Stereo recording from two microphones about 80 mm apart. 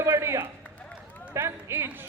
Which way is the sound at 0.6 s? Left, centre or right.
Left.